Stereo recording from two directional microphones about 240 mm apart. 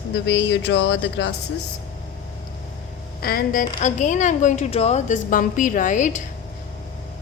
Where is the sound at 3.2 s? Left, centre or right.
Left.